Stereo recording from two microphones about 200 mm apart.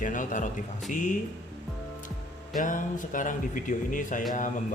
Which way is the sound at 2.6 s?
40° left (ahead or behind).